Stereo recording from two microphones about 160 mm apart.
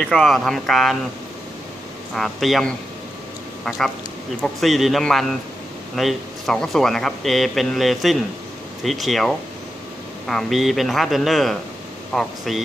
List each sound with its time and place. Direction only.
0.0 s speech: 5° left (ahead or behind)
2.1 s speech: centre (ahead or behind)